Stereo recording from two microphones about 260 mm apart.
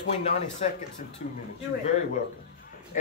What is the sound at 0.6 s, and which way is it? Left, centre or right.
Speech, left.